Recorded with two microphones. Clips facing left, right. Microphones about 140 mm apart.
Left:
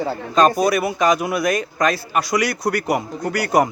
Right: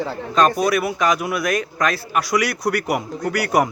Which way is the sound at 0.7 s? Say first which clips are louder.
Left 2 dB; 5° right (ahead or behind).